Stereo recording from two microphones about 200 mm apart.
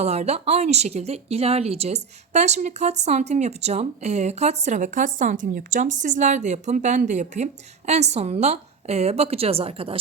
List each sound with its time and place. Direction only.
0.0 s speech: 35° right (ahead or behind)